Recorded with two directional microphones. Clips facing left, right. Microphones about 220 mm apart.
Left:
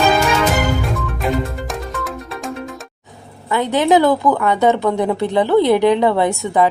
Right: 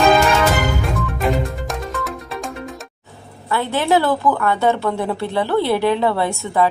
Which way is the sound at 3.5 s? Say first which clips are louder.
Left 3 dB; 15° left (ahead or behind).